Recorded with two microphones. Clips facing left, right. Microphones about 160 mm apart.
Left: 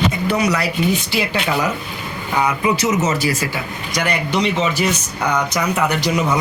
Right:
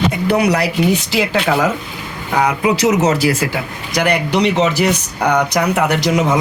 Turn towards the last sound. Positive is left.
turn(degrees=-85)